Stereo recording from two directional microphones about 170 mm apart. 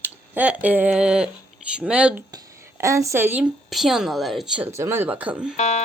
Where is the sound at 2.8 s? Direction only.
20° right (ahead or behind).